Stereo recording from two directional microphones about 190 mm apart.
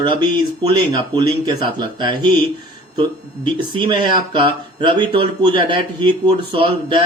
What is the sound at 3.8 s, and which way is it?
A man's voice, 25° right (ahead or behind).